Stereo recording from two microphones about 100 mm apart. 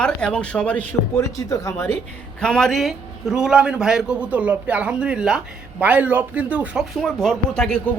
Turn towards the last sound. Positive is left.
turn(degrees=5)  # may be behind; listen again after turning